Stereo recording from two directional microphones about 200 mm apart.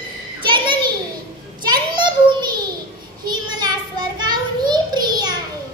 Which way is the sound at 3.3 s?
20° right (ahead or behind).